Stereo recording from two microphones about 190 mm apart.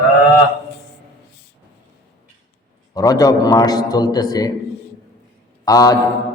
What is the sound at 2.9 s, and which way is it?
A man's voice, 20° left (ahead or behind).